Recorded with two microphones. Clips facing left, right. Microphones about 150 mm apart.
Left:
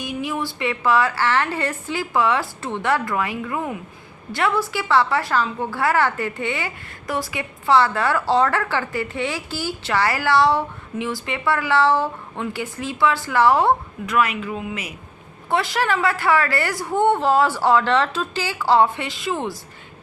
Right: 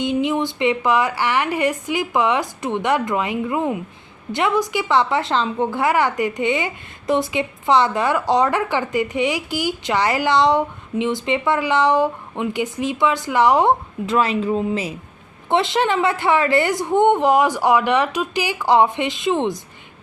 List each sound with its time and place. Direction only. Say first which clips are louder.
0.0 s a woman's voice: right 6 dB; 20° right (ahead or behind)
15.4 s a woman's voice: right 3 dB; 20° right (ahead or behind)